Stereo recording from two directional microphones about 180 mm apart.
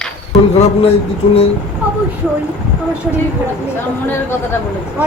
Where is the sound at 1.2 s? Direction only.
30° left (ahead or behind).